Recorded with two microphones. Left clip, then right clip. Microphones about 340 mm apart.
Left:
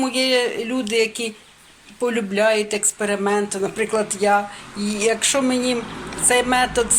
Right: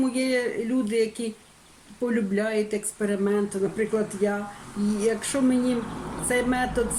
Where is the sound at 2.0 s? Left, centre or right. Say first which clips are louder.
Left 8 dB; left.